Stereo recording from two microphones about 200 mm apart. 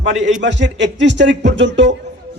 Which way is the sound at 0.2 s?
65° right (ahead or behind).